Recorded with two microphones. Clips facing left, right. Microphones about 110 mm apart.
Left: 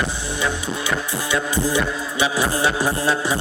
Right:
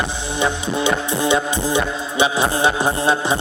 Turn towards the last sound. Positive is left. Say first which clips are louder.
# right 3 dB
turn(degrees=-25)  # may be behind; listen again after turning